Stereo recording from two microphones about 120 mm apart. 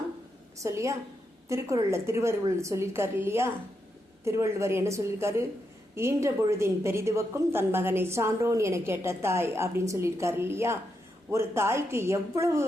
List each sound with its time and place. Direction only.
0.6 s a woman's voice: 25° right (ahead or behind)